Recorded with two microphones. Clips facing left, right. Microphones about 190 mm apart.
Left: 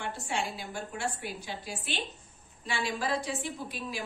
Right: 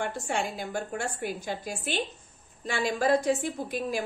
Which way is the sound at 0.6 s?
45° right (ahead or behind).